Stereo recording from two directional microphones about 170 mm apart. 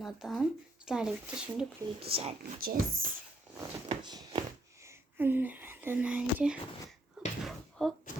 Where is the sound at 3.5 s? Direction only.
25° right (ahead or behind).